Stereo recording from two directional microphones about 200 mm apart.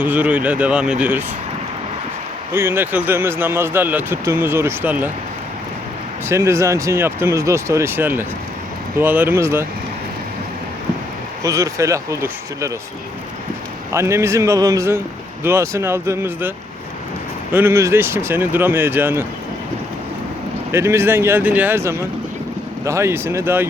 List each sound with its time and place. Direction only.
0.0 s speech: 10° right (ahead or behind)
2.5 s speech: 10° right (ahead or behind)
6.2 s speech: 15° right (ahead or behind)
11.4 s speech: 15° right (ahead or behind)
13.9 s speech: 15° right (ahead or behind)
17.5 s speech: 10° right (ahead or behind)
20.7 s speech: 15° right (ahead or behind)